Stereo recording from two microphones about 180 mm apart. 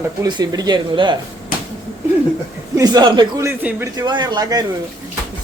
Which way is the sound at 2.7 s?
20° right (ahead or behind).